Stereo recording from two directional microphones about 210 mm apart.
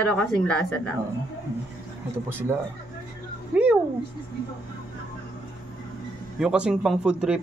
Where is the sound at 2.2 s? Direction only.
10° right (ahead or behind).